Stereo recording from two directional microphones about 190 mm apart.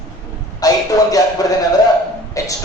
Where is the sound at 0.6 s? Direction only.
20° left (ahead or behind).